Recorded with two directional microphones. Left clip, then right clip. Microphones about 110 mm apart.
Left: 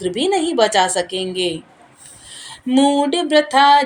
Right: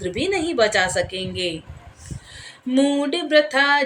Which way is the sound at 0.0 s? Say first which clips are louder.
Left 5 dB; 15° left (ahead or behind).